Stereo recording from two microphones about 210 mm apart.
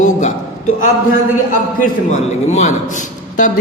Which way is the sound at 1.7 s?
35° left (ahead or behind).